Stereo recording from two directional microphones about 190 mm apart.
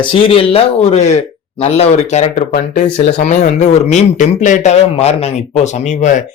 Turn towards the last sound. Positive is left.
turn(degrees=40)  # may be behind; listen again after turning